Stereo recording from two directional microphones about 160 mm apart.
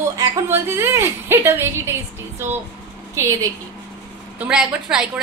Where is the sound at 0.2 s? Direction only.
15° right (ahead or behind).